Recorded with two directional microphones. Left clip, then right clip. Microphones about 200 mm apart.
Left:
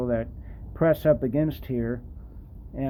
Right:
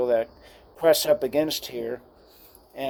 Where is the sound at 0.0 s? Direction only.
15° right (ahead or behind).